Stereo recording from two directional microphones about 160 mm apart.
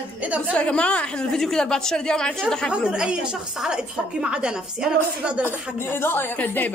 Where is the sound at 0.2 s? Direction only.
10° right (ahead or behind).